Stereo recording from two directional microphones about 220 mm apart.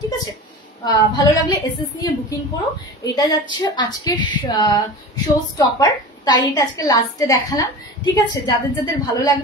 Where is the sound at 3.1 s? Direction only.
20° left (ahead or behind).